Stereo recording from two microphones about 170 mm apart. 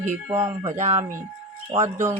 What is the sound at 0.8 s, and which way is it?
Speech, 45° right (ahead or behind).